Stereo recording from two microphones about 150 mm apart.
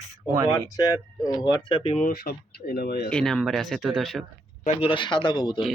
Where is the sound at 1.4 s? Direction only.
30° left (ahead or behind).